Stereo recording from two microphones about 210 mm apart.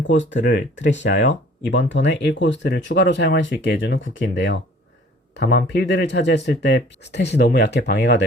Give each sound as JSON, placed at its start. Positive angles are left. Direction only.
{"t": 0.1, "sound": "speech", "side_deg": 60}